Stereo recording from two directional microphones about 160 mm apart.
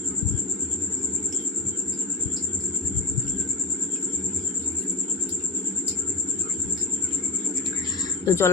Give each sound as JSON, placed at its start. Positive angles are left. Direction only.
{"t": 8.2, "sound": "speech", "side_deg": 20}